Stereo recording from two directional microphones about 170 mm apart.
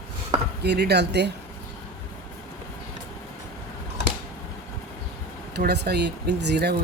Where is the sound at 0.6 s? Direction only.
75° right (ahead or behind).